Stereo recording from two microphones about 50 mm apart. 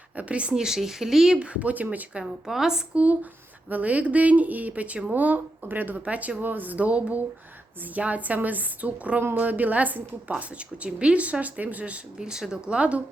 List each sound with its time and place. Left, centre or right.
0.2 s speech: right
0.5 s speech: centre
1.4 s speech: right
2.2 s speech: centre
2.9 s speech: right
10.8 s speech: right
12.2 s speech: centre